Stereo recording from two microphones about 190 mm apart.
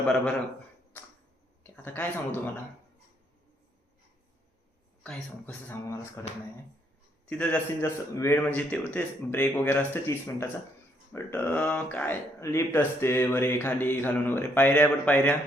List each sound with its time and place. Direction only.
0.9 s a sound: 10° left (ahead or behind)
1.6 s speech: 10° left (ahead or behind)
5.0 s speech: 5° left (ahead or behind)
7.3 s speech: 10° left (ahead or behind)